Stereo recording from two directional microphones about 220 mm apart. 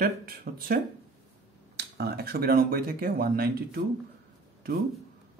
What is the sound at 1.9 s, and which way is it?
Speech, 45° right (ahead or behind).